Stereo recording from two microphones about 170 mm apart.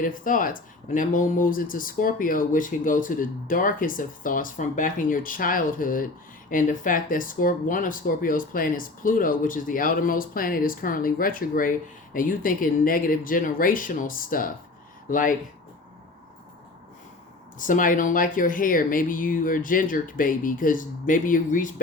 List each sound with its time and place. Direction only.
0.0 s speech: 55° left (ahead or behind)
17.6 s speech: 50° left (ahead or behind)